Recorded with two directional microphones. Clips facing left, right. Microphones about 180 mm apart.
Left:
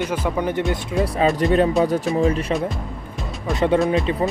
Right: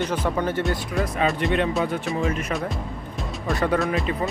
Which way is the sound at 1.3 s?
40° left (ahead or behind).